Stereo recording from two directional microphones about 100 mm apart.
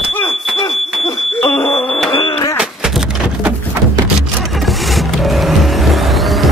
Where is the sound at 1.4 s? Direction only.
65° left (ahead or behind).